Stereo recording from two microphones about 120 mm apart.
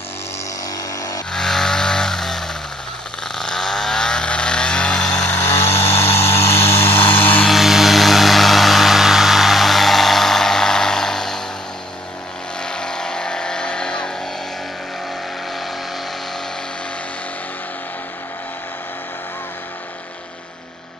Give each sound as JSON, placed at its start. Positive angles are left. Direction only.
{"t": 1.3, "sound": "vehicle", "side_deg": 5}
{"t": 5.4, "sound": "vehicle", "side_deg": 20}
{"t": 7.4, "sound": "vehicle", "side_deg": 0}
{"t": 12.6, "sound": "vehicle", "side_deg": 5}